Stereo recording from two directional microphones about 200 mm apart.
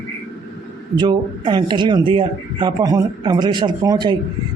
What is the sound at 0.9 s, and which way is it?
Speech, 20° right (ahead or behind).